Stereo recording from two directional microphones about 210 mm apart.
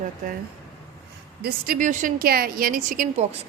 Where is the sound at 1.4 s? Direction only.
45° right (ahead or behind).